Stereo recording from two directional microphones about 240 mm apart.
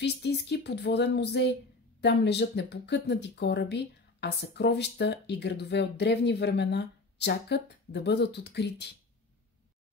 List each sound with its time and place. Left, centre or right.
0.0 s speech: left